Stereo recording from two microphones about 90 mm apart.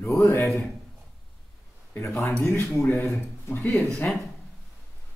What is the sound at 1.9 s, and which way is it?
Speech, 30° left (ahead or behind).